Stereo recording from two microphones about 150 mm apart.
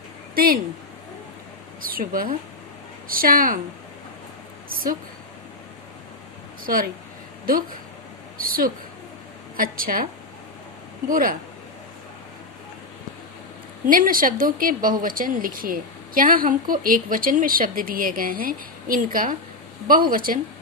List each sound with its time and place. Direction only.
0.3 s speech: 75° right (ahead or behind)
1.9 s speech: 70° right (ahead or behind)
4.7 s speech: 75° right (ahead or behind)
6.7 s speech: 75° right (ahead or behind)
11.1 s speech: 70° right (ahead or behind)
13.8 s speech: 65° right (ahead or behind)